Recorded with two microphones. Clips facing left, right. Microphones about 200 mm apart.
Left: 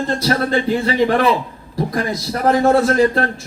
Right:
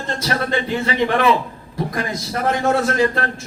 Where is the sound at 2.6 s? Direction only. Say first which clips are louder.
Left 4 dB; 35° left (ahead or behind).